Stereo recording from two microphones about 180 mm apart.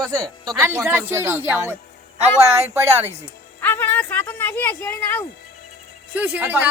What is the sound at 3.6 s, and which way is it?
Speech, 10° left (ahead or behind).